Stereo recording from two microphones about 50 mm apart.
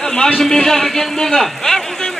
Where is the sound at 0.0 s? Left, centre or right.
Centre.